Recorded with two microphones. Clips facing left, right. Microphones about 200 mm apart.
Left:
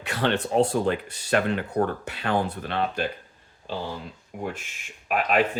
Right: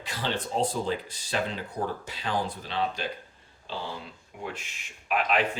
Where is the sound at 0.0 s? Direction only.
65° left (ahead or behind).